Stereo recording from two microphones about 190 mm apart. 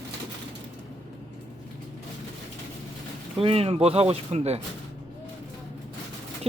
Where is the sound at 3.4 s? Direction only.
30° right (ahead or behind).